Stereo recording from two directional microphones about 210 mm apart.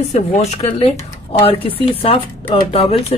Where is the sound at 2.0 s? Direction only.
30° left (ahead or behind).